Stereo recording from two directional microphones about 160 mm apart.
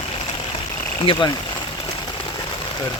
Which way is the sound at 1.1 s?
35° left (ahead or behind).